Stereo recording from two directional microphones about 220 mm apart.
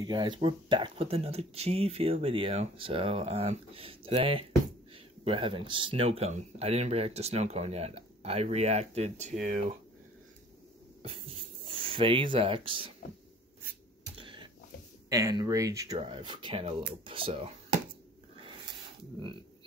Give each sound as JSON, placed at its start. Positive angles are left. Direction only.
{"t": 0.0, "sound": "speech", "side_deg": -20}
{"t": 11.2, "sound": "speech", "side_deg": -25}
{"t": 14.1, "sound": "a sound", "side_deg": -20}
{"t": 15.0, "sound": "speech", "side_deg": -15}